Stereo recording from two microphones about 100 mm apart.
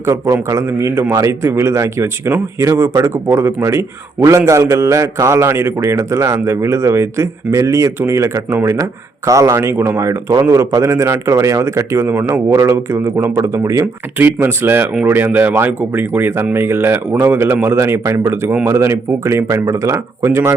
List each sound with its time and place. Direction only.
0.0 s a man's voice: 30° right (ahead or behind)